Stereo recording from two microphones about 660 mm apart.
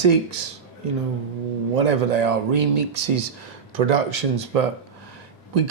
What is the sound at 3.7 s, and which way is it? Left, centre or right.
Speech, right.